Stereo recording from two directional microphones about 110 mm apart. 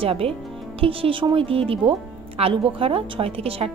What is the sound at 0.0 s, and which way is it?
Speech, 60° right (ahead or behind).